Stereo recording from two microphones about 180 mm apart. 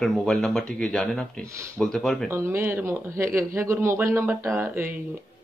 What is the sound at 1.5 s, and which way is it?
Speech, 15° right (ahead or behind).